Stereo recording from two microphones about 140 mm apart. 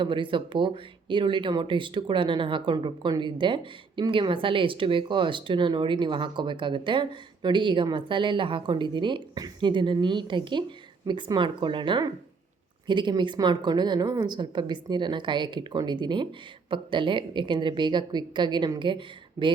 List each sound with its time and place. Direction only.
0.0 s speech: 35° right (ahead or behind)